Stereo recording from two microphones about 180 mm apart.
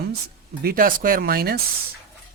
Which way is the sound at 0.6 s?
55° right (ahead or behind).